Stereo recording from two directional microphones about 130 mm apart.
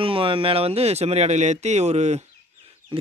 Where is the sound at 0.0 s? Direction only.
45° right (ahead or behind); by 2.2 s 60° right (ahead or behind).